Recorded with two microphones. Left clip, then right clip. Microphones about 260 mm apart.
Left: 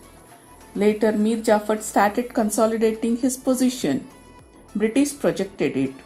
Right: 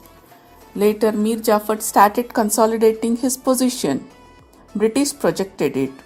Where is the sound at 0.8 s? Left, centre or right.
Right.